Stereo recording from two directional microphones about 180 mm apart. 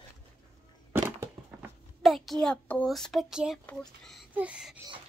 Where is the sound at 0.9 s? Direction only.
10° right (ahead or behind).